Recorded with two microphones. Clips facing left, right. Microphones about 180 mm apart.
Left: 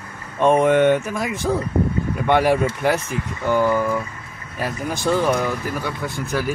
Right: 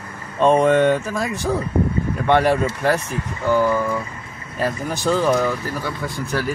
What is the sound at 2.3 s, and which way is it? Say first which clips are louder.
Speech: even; 10° left (ahead or behind).